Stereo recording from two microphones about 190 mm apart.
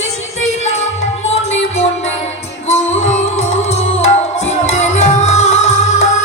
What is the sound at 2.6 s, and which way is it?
Music, 35° left (ahead or behind).